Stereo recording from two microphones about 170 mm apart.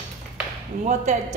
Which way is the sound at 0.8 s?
45° right (ahead or behind).